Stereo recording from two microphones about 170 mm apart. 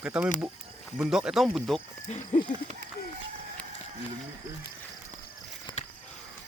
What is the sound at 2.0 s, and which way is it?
Speech, 40° left (ahead or behind).